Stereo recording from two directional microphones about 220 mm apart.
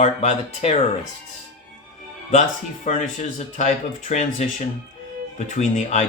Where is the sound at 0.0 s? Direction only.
25° left (ahead or behind).